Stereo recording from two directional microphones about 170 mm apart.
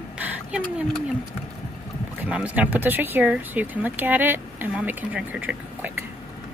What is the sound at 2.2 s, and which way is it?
Speech, 10° right (ahead or behind).